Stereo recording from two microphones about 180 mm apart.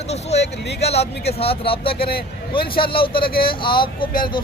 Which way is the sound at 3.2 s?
55° left (ahead or behind).